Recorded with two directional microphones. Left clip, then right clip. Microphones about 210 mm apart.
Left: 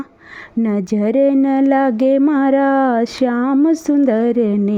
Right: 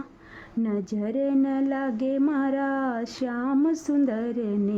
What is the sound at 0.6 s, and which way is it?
Speech, 35° left (ahead or behind).